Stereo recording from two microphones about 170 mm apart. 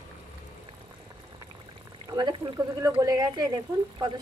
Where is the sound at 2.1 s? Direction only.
25° right (ahead or behind).